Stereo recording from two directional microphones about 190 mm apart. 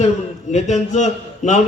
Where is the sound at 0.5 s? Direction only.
40° left (ahead or behind).